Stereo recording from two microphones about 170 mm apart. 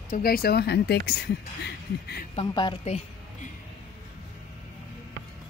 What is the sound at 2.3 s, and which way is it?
Speech, 25° left (ahead or behind).